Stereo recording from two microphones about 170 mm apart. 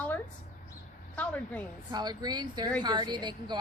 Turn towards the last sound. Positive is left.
turn(degrees=-25)  # may be behind; listen again after turning